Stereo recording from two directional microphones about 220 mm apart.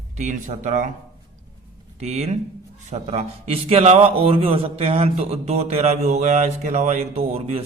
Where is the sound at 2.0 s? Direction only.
30° right (ahead or behind).